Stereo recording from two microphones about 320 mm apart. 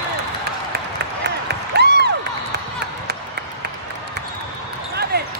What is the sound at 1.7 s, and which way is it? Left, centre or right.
Crowd, right.